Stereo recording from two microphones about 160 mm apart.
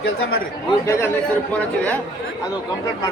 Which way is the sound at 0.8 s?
15° left (ahead or behind).